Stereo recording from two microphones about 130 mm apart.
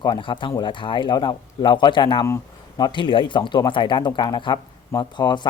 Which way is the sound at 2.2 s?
20° left (ahead or behind).